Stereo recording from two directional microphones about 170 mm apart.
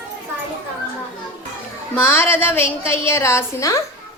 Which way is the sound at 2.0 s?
15° left (ahead or behind).